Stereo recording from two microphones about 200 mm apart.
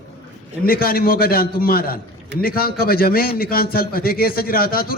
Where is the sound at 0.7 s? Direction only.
50° left (ahead or behind).